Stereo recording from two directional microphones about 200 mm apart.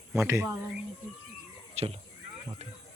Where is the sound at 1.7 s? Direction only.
30° right (ahead or behind).